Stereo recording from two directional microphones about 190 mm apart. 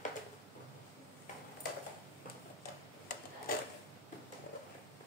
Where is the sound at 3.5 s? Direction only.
50° left (ahead or behind).